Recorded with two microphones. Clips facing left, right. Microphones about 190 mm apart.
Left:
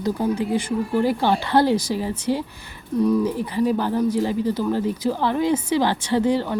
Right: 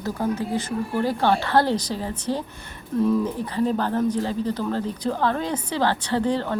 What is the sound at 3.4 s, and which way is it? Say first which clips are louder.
A woman's voice: left 2 dB; 10° left (ahead or behind).